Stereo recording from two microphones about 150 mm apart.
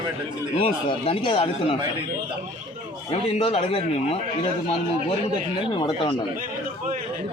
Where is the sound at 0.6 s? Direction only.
35° left (ahead or behind).